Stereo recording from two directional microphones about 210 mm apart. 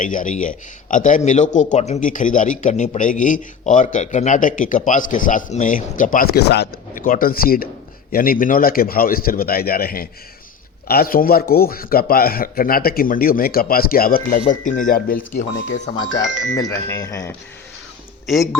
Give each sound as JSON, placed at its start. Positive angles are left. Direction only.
{"t": 0.0, "sound": "a man's voice", "side_deg": 40}
{"t": 16.0, "sound": "speech", "side_deg": 15}